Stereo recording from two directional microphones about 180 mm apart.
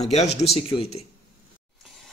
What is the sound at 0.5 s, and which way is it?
Speech, 35° left (ahead or behind).